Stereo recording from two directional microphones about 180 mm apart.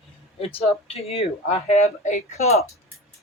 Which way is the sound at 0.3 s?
35° left (ahead or behind).